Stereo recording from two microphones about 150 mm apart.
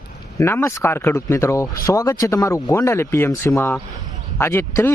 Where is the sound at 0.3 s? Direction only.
15° left (ahead or behind).